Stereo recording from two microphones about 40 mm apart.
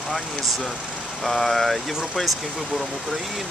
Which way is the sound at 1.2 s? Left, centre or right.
Centre.